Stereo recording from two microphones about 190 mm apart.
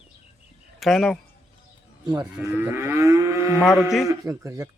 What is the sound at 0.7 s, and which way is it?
Speech, centre (ahead or behind).